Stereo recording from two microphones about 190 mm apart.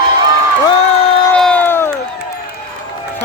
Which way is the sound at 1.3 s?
5° left (ahead or behind).